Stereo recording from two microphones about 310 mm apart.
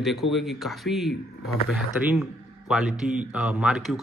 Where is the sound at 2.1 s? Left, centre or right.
Centre.